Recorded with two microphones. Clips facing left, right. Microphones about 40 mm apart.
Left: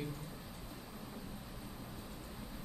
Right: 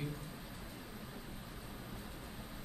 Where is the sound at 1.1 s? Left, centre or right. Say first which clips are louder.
Left 1 dB; centre.